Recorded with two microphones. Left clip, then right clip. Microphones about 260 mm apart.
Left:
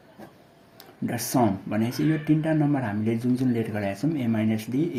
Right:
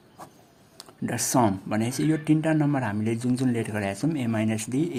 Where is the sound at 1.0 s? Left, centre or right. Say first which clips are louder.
Right 1 dB; right.